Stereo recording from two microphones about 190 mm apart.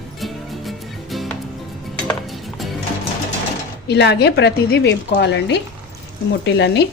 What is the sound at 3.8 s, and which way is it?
A woman's voice, 65° left (ahead or behind).